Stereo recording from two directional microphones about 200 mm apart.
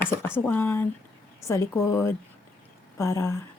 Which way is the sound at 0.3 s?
10° left (ahead or behind).